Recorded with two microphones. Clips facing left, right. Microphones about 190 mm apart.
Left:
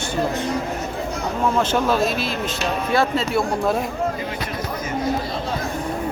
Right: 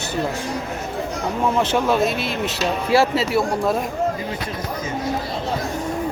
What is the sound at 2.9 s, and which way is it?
Speech, 5° right (ahead or behind).